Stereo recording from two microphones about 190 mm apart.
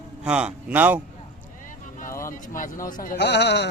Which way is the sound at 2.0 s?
45° left (ahead or behind).